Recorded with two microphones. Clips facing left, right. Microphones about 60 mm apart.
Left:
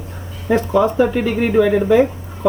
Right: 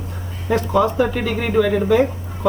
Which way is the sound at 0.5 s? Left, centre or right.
Left.